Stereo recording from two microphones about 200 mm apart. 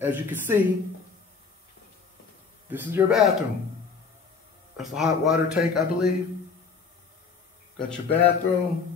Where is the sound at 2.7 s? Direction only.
10° right (ahead or behind).